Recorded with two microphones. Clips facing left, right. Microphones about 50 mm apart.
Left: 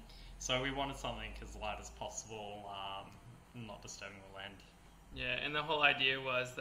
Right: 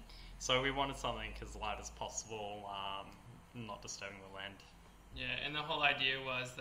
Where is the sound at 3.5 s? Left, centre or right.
Centre.